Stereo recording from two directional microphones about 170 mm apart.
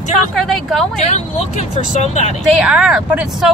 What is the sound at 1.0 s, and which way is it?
Speech, 40° left (ahead or behind).